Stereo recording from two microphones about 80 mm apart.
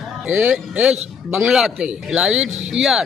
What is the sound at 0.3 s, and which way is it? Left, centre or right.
A man's voice, centre.